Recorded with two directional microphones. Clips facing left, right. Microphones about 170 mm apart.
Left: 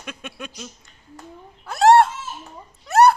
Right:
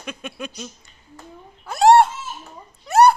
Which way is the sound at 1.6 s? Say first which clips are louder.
Right 1 dB; centre (ahead or behind).